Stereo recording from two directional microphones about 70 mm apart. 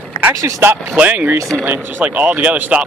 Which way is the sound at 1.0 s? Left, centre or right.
Right.